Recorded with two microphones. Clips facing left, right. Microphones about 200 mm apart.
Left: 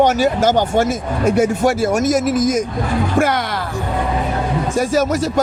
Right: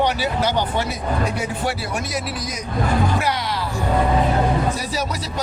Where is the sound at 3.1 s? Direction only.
50° left (ahead or behind).